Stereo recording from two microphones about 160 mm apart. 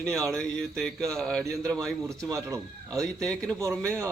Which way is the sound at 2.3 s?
20° right (ahead or behind).